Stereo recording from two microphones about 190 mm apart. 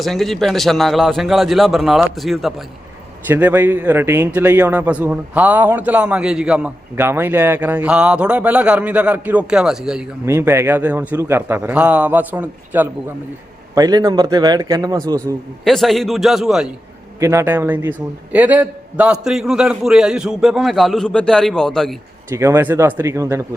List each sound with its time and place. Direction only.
0.0 s a man's voice: centre (ahead or behind)
3.2 s a man's voice: 10° right (ahead or behind)
10.2 s a man's voice: 15° right (ahead or behind)
13.7 s a man's voice: 20° right (ahead or behind)
15.6 s a man's voice: centre (ahead or behind)
17.2 s a man's voice: 15° right (ahead or behind); by 21.9 s 5° left (ahead or behind)
22.3 s a man's voice: 15° right (ahead or behind)